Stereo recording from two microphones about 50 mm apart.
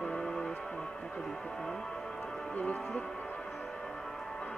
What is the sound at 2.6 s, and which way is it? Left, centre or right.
Music, left.